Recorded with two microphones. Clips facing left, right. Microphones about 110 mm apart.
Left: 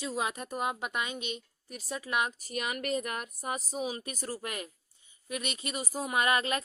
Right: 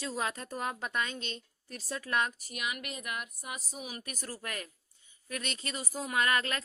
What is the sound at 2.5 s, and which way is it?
Speech, 40° left (ahead or behind).